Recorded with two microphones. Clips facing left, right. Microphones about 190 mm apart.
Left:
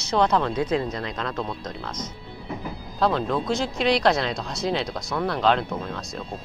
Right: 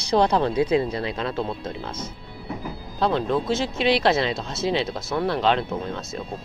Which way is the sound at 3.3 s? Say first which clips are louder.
Right 1 dB; centre (ahead or behind).